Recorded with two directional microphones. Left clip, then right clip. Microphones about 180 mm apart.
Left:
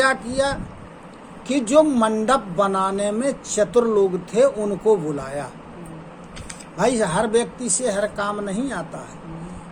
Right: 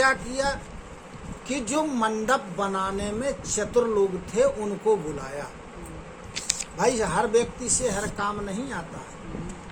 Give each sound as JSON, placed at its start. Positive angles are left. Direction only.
{"t": 0.0, "sound": "a woman's voice", "side_deg": 25}
{"t": 6.7, "sound": "a woman's voice", "side_deg": 25}